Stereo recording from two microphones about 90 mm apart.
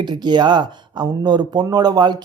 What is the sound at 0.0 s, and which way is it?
Speech, 55° right (ahead or behind).